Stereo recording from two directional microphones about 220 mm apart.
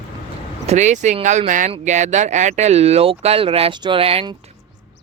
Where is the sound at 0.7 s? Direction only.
30° right (ahead or behind).